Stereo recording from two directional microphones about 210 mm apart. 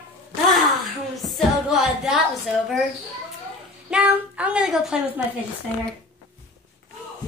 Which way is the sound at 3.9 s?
5° right (ahead or behind).